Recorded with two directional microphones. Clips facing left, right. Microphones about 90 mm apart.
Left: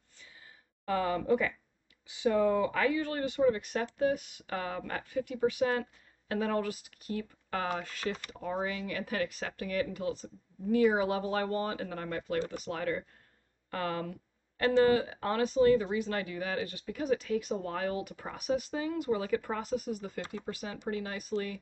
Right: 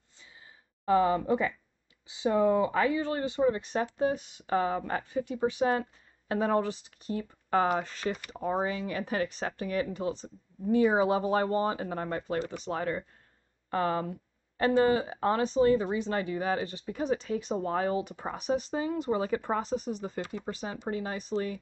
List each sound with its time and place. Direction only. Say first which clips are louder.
0.8 s speech: right 5 dB; 25° right (ahead or behind)